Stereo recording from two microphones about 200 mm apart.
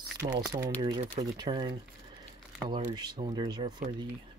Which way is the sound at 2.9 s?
20° right (ahead or behind).